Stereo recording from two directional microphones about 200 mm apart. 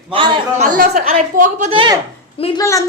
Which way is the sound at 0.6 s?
35° right (ahead or behind).